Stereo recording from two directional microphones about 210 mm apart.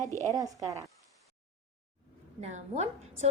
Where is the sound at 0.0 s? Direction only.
15° left (ahead or behind).